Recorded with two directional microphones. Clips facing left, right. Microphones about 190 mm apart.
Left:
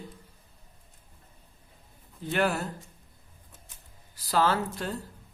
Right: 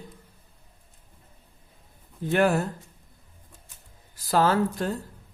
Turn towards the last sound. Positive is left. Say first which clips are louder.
# right 4 dB
turn(degrees=-45)  # may be behind; listen again after turning